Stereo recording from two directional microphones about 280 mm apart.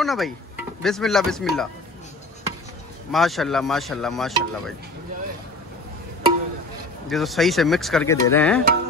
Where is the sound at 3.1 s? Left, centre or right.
Centre.